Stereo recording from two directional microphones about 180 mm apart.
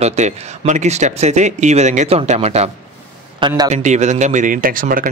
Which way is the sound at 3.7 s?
40° right (ahead or behind).